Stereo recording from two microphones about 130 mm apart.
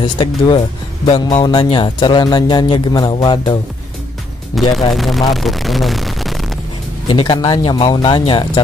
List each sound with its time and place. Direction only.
0.0 s a man's voice: 35° left (ahead or behind)
1.0 s music: 50° left (ahead or behind)
1.4 s a man's voice: 35° left (ahead or behind)
4.6 s speech: centre (ahead or behind)
7.1 s a man's voice: 40° left (ahead or behind)